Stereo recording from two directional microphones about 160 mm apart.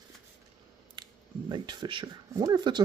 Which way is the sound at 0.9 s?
30° right (ahead or behind).